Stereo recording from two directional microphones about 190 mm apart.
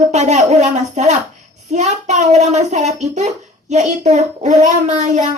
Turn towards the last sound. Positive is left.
turn(degrees=-40)  # may be behind; listen again after turning